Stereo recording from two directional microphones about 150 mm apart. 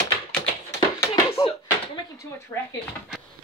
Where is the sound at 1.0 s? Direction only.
20° left (ahead or behind).